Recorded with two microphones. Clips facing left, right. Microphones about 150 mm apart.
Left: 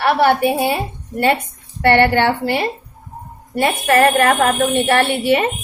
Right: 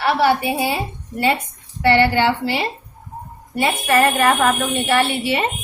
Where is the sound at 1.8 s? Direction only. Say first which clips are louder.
Left 2 dB; 55° left (ahead or behind).